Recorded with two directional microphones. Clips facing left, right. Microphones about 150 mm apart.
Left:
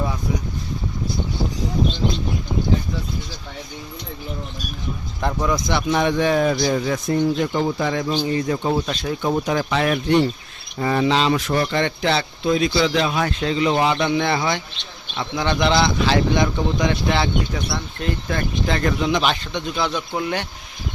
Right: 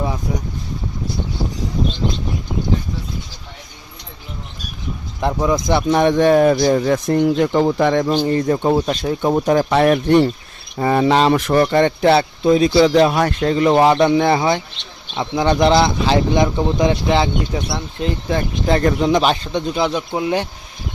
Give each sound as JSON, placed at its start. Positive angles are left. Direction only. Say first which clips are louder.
{"t": 5.2, "sound": "speech", "louder": "right 4 dB", "side_deg": -20}
{"t": 5.6, "sound": "speech", "louder": "right 6 dB", "side_deg": -40}
{"t": 6.9, "sound": "speech", "louder": "right 4 dB", "side_deg": -65}
{"t": 11.6, "sound": "speech", "louder": "right 7 dB", "side_deg": -45}
{"t": 12.5, "sound": "speech", "louder": "right 6 dB", "side_deg": -35}
{"t": 14.3, "sound": "speech", "louder": "right 5 dB", "side_deg": -30}
{"t": 15.4, "sound": "speech", "louder": "right 5 dB", "side_deg": -35}
{"t": 18.7, "sound": "speech", "louder": "right 6 dB", "side_deg": -35}
{"t": 20.1, "sound": "speech", "louder": "right 5 dB", "side_deg": -20}